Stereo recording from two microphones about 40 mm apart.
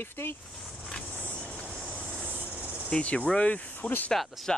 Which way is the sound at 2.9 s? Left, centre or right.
Left.